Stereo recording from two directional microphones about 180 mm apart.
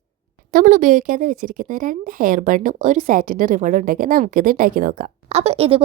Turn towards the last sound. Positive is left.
turn(degrees=-35)  # may be behind; listen again after turning